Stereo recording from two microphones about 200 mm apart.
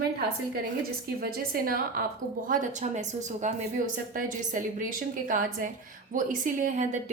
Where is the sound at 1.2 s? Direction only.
45° right (ahead or behind).